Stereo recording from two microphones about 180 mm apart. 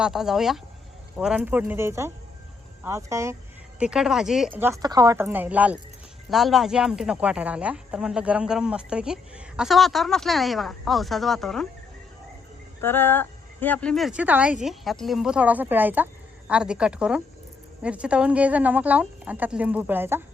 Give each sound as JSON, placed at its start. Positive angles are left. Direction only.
{"t": 0.0, "sound": "speech", "side_deg": 0}
{"t": 3.8, "sound": "speech", "side_deg": -5}
{"t": 12.8, "sound": "speech", "side_deg": 10}